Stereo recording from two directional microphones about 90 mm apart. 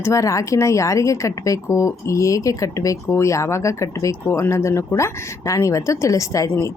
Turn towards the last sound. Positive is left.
turn(degrees=35)  # may be behind; listen again after turning